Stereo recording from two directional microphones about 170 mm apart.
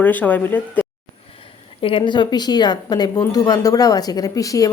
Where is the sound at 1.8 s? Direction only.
30° left (ahead or behind).